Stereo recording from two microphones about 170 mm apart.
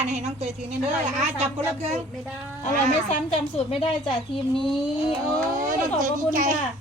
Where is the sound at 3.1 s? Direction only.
40° left (ahead or behind).